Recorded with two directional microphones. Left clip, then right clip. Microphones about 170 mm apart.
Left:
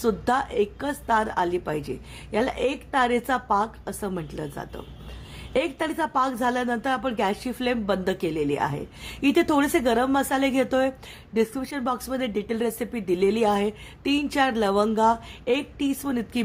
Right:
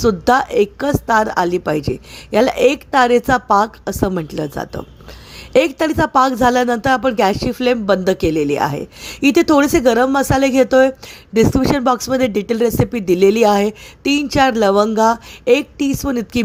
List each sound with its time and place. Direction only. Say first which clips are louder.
0.0 s speech: right 10 dB; 35° right (ahead or behind)